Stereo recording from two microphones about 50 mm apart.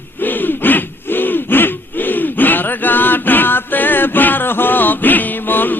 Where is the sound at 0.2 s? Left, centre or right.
Left.